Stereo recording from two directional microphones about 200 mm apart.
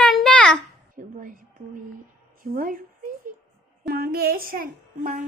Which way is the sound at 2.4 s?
45° right (ahead or behind).